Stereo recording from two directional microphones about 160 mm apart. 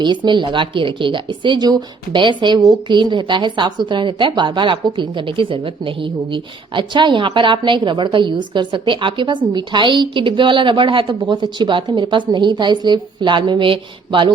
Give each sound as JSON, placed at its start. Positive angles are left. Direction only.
{"t": 0.0, "sound": "a woman's voice", "side_deg": -30}